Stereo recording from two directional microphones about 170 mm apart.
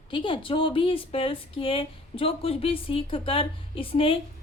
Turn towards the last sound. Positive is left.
turn(degrees=30)  # may be behind; listen again after turning